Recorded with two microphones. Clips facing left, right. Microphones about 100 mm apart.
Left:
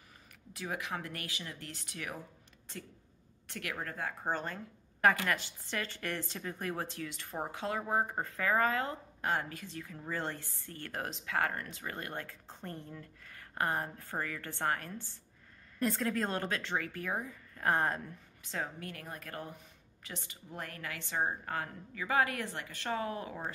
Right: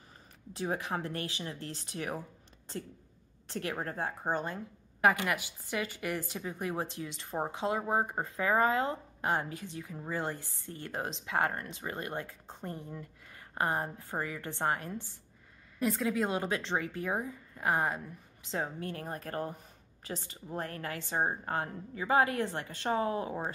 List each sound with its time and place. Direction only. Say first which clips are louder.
0.5 s a woman's voice: right 5 dB; 30° right (ahead or behind)
3.4 s speech: right 5 dB; 30° right (ahead or behind)
4.2 s speech: right 1 dB; 15° right (ahead or behind)
15.8 s speech: right 2 dB; 5° right (ahead or behind); by 17.6 s 20° right (ahead or behind)
17.6 s a woman's voice: even; 5° right (ahead or behind)
18.4 s a woman's voice: right 4 dB; 25° right (ahead or behind)